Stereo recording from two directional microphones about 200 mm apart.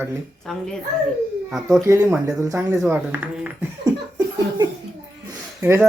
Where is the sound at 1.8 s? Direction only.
15° right (ahead or behind).